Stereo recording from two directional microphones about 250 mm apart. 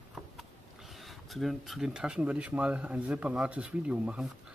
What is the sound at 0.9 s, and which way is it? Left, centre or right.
Speech, centre.